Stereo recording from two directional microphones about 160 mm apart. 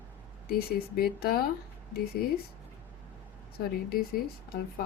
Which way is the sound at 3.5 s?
70° left (ahead or behind).